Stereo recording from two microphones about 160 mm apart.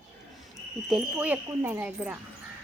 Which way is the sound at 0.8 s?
5° right (ahead or behind).